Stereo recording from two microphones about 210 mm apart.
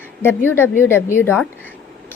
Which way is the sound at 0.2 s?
10° left (ahead or behind).